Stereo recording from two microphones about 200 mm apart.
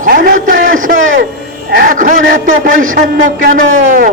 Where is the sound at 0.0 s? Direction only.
45° right (ahead or behind).